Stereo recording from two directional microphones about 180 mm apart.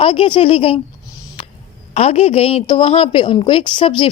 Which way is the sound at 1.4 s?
30° left (ahead or behind).